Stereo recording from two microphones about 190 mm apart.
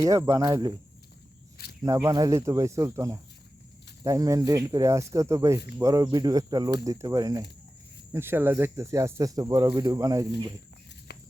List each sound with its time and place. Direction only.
0.0 s speech: 15° right (ahead or behind)
1.8 s speech: 15° right (ahead or behind)
11.1 s a sound: 60° left (ahead or behind)